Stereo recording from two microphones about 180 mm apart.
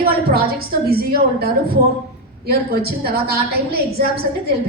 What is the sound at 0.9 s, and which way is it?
A woman's voice, 60° right (ahead or behind).